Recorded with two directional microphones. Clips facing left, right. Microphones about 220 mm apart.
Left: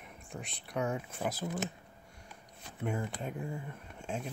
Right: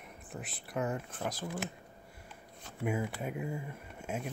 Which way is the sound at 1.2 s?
5° left (ahead or behind).